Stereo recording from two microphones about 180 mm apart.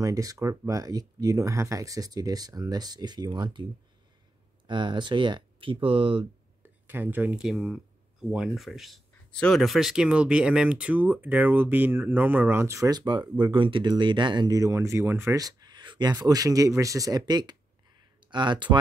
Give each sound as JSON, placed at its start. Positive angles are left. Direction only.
{"t": 0.0, "sound": "speech", "side_deg": -20}
{"t": 4.6, "sound": "speech", "side_deg": -25}
{"t": 6.6, "sound": "speech", "side_deg": -10}